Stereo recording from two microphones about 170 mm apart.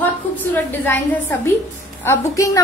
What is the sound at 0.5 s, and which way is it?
A woman's voice, 10° left (ahead or behind).